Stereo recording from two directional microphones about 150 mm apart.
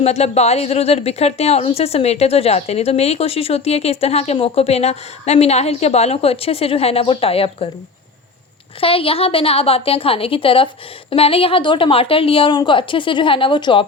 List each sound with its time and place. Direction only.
0.0 s a woman's voice: 45° left (ahead or behind)
8.8 s a woman's voice: 40° left (ahead or behind)